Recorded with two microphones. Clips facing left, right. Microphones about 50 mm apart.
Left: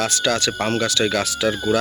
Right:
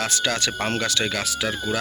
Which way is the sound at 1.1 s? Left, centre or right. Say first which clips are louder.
Left 5 dB; centre.